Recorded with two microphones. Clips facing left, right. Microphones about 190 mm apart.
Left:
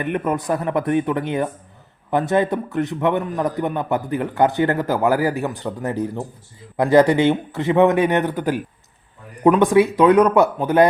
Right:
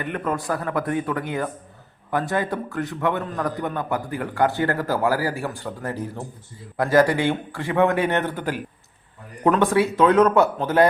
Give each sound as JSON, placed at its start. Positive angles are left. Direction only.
{"t": 0.0, "sound": "a man's voice", "side_deg": 20}